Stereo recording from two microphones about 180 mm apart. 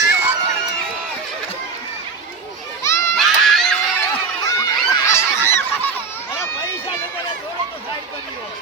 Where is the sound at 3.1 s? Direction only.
Centre (ahead or behind).